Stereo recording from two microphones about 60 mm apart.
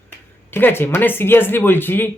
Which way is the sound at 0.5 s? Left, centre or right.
Left.